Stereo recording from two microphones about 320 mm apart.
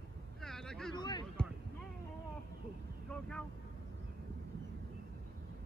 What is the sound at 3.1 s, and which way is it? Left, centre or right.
Speech, centre.